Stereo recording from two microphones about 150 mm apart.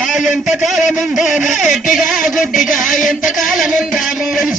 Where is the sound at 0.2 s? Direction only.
55° left (ahead or behind).